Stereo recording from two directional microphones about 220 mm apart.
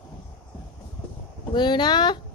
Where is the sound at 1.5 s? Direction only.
20° left (ahead or behind).